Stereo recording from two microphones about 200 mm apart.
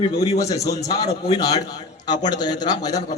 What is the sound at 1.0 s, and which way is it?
Speech, 30° left (ahead or behind).